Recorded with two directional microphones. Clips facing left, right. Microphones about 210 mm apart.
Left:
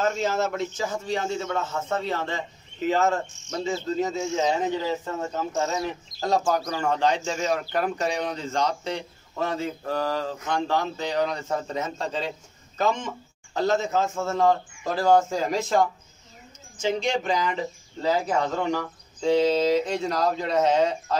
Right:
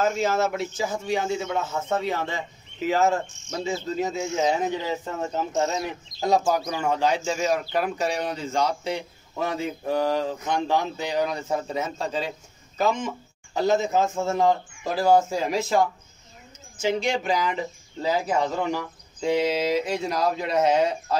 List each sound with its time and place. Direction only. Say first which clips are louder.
0.0 s speech: right 2 dB; 10° right (ahead or behind)
5.3 s speech: right 3 dB; 20° right (ahead or behind)
17.0 s speech: even; 10° right (ahead or behind)